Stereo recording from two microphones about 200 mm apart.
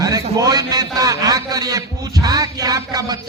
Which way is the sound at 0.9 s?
15° right (ahead or behind).